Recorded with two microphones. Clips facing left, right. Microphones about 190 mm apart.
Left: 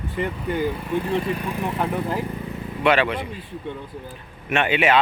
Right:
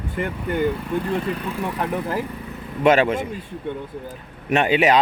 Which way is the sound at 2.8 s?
45° right (ahead or behind).